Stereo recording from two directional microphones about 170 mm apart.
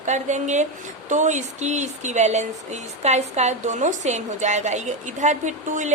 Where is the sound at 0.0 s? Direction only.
45° right (ahead or behind).